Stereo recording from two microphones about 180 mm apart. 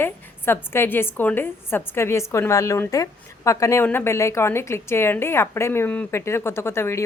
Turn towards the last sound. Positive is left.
turn(degrees=15)  # may be behind; listen again after turning